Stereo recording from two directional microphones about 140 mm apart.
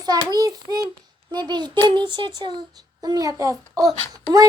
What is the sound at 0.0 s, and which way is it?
A child's voice, 30° right (ahead or behind).